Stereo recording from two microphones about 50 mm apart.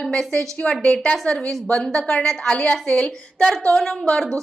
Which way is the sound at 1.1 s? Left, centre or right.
Centre.